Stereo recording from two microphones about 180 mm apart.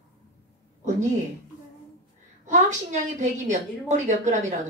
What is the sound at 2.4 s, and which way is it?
A woman's voice, 40° right (ahead or behind).